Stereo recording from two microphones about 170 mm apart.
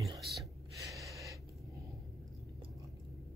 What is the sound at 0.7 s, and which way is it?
Gasp, 20° right (ahead or behind).